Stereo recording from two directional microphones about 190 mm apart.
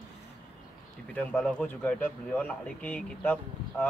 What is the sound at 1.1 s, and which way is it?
Speech, 5° left (ahead or behind).